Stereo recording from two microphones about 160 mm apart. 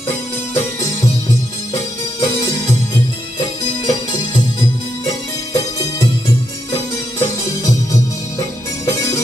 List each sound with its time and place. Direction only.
5.5 s music: 25° left (ahead or behind)